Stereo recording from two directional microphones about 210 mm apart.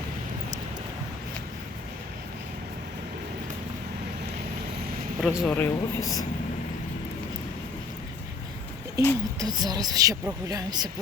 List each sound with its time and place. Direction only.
5.2 s speech: 5° right (ahead or behind)
5.5 s speech: 15° left (ahead or behind)
9.0 s a woman's voice: 15° right (ahead or behind)